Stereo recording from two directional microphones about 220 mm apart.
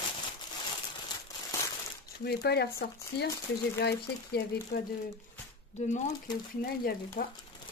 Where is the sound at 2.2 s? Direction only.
50° left (ahead or behind).